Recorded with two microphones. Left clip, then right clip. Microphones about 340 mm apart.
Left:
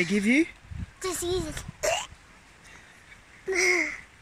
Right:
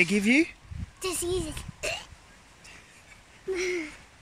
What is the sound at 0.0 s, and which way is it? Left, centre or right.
Speech, centre.